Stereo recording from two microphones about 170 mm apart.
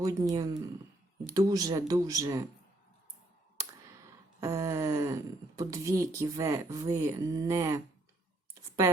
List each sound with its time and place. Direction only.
0.0 s speech: 20° right (ahead or behind)
4.4 s speech: 15° right (ahead or behind)